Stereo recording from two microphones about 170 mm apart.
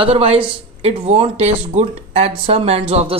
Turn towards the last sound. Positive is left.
turn(degrees=-35)  # may be behind; listen again after turning